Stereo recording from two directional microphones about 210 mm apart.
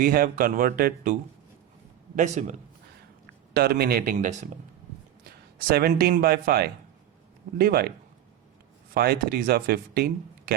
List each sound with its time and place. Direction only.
0.0 s speech: 45° right (ahead or behind)
2.1 s a man's voice: 35° right (ahead or behind)
3.5 s speech: 45° right (ahead or behind)
5.6 s speech: 45° right (ahead or behind)
9.0 s speech: 45° right (ahead or behind)